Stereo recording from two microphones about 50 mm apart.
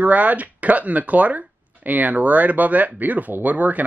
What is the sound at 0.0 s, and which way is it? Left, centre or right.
Speech, right.